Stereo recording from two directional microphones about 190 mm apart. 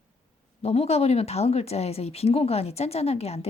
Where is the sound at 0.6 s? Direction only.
35° left (ahead or behind).